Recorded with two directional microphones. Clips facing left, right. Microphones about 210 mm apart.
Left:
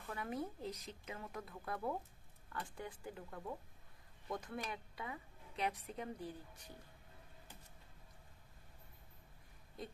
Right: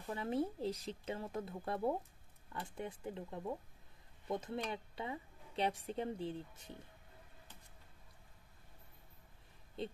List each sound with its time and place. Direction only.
0.0 s a woman's voice: 25° right (ahead or behind)